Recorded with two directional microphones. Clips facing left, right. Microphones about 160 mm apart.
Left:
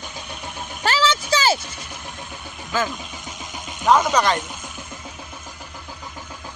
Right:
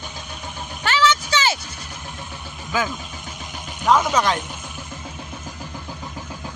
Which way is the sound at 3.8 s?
Centre (ahead or behind).